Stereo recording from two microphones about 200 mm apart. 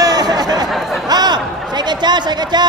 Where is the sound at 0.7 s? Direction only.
Centre (ahead or behind).